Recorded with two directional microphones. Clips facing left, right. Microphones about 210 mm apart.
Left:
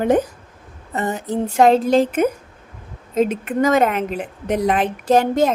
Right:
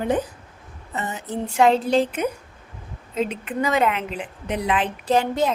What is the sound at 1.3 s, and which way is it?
Speech, 40° left (ahead or behind).